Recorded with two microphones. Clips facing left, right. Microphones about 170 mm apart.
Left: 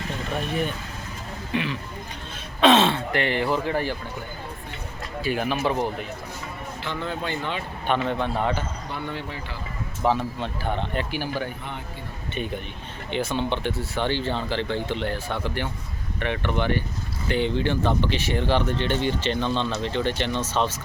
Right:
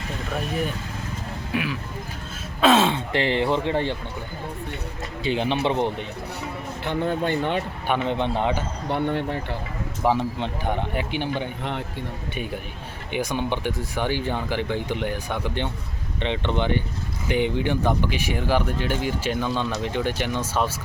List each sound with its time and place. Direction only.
1.5 s speech: 5° right (ahead or behind)
3.1 s speech: 25° right (ahead or behind)
5.2 s speech: 25° right (ahead or behind)
6.8 s speech: 50° right (ahead or behind)
7.9 s speech: 15° right (ahead or behind)
8.9 s speech: 60° right (ahead or behind)
10.0 s speech: 15° right (ahead or behind)
13.1 s speech: 10° right (ahead or behind)